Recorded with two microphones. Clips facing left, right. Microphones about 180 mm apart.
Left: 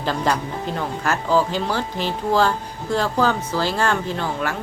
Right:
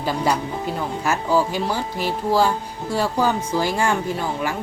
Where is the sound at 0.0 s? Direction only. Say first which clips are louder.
Even; 10° right (ahead or behind).